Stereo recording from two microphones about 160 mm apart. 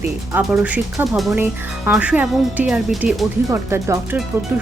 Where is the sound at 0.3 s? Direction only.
10° right (ahead or behind).